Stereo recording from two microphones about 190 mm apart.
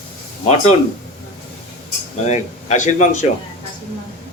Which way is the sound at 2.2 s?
35° left (ahead or behind).